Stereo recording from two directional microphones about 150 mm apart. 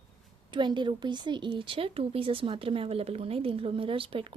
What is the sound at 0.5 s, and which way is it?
A woman's voice, 30° right (ahead or behind).